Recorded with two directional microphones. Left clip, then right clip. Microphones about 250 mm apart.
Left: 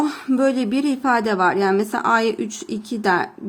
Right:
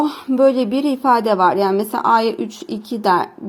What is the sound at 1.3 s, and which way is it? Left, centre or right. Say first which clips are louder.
Speech: right 4 dB; centre.